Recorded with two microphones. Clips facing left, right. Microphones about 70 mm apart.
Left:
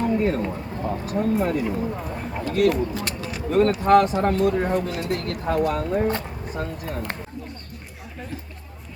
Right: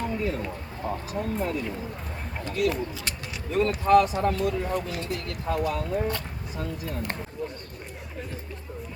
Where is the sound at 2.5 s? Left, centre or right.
Left.